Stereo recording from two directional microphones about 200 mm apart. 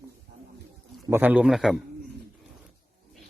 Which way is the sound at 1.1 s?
10° right (ahead or behind).